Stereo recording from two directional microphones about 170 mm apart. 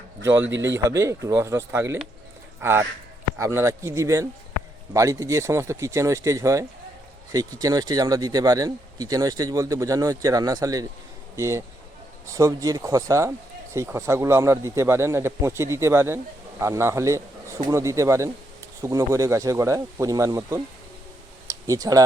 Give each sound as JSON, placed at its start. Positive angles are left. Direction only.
{"t": 0.4, "sound": "speech", "side_deg": -90}
{"t": 0.9, "sound": "a man's voice", "side_deg": -20}